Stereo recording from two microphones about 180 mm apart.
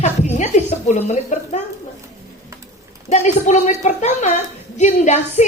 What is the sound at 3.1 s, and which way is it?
A woman's voice, 40° left (ahead or behind).